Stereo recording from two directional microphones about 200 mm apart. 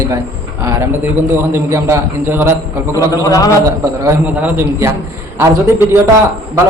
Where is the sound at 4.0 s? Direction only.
10° right (ahead or behind).